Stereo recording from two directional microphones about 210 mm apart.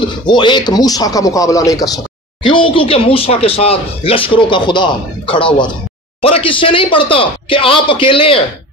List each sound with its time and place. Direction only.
0.2 s speech: 20° left (ahead or behind)